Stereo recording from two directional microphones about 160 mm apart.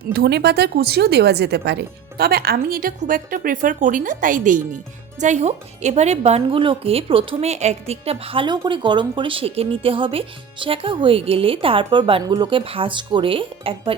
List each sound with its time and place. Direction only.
0.1 s a woman's voice: 85° right; by 13.9 s 35° right (ahead or behind)